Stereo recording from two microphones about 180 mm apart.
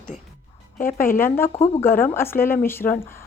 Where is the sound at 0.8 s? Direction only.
50° left (ahead or behind).